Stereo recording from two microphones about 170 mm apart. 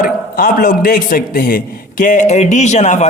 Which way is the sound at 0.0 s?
55° left (ahead or behind).